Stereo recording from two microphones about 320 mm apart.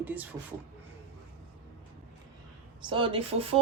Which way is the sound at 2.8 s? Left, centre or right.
Centre.